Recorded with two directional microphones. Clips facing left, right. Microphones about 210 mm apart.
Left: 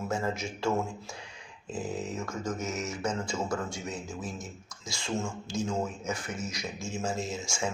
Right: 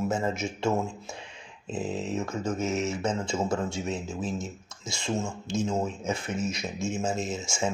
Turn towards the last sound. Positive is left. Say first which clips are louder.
# right 3 dB
turn(degrees=-25)  # may be behind; listen again after turning